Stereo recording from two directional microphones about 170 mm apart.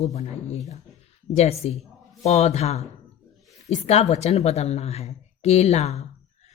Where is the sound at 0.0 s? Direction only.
40° left (ahead or behind).